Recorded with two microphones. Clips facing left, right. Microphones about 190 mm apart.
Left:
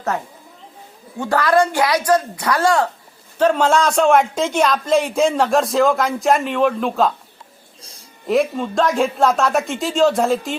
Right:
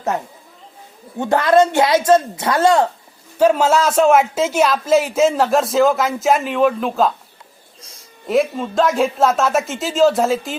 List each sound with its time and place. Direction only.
1.2 s a woman's voice: 20° right (ahead or behind)
3.3 s a man's voice: 10° right (ahead or behind)
8.3 s a man's voice: centre (ahead or behind)